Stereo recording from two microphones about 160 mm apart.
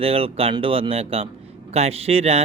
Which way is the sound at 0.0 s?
35° right (ahead or behind).